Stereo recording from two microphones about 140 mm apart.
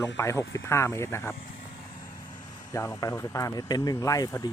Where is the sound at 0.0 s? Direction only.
20° left (ahead or behind).